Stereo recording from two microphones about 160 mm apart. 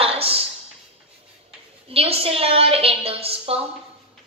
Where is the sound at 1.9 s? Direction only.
35° right (ahead or behind).